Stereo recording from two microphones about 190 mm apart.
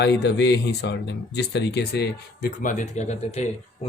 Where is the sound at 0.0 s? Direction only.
65° left (ahead or behind).